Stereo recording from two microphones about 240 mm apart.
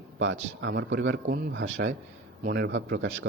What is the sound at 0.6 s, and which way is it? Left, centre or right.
Speech, right.